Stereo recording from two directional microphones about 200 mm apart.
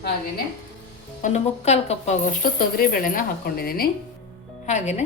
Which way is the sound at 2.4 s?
45° left (ahead or behind).